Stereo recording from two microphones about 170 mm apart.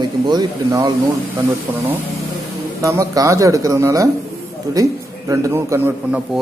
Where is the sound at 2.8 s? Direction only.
20° right (ahead or behind).